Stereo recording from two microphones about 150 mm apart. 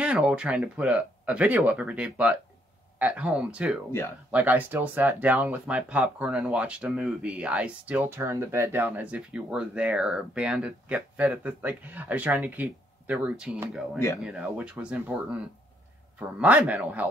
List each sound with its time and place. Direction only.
0.0 s speech: 5° right (ahead or behind)
13.9 s speech: 15° left (ahead or behind)
14.2 s speech: 5° right (ahead or behind)